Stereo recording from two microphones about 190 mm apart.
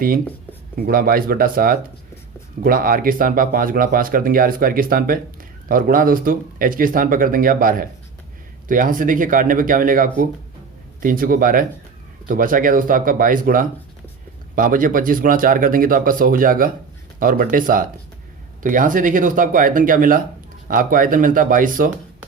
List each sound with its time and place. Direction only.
0.8 s speech: 50° right (ahead or behind)